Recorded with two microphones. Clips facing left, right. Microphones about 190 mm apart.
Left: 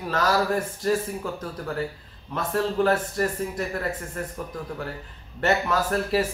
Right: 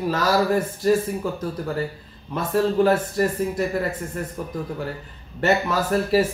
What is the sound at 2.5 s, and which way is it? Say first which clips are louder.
Speech: right 4 dB; 5° right (ahead or behind).